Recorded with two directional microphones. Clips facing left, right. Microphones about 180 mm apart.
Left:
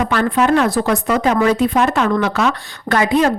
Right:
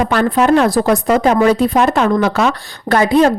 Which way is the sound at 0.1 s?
35° right (ahead or behind).